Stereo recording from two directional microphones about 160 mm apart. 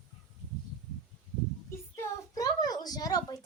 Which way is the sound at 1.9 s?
20° left (ahead or behind).